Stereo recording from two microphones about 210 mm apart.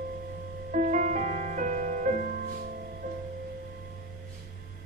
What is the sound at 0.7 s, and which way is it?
Music, 35° right (ahead or behind).